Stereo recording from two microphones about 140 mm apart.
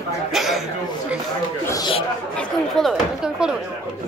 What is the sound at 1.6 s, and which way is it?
Speech, 25° left (ahead or behind).